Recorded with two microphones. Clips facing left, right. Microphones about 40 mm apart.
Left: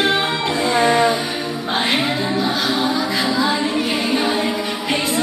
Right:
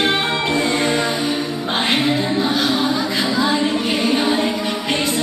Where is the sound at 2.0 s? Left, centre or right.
Centre.